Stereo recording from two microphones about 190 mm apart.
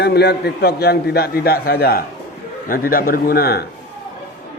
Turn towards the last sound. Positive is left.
turn(degrees=55)  # may be behind; listen again after turning